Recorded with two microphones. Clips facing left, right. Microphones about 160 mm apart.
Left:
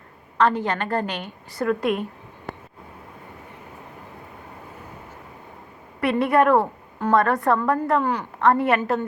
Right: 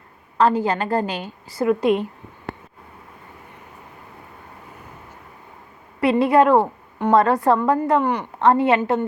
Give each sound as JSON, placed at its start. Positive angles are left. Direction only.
{"t": 0.3, "sound": "a woman's voice", "side_deg": -35}
{"t": 6.0, "sound": "a woman's voice", "side_deg": -25}